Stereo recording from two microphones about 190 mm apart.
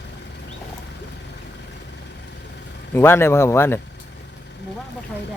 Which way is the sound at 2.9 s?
10° left (ahead or behind).